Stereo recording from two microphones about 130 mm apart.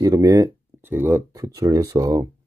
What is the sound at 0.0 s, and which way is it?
Speech, 25° right (ahead or behind).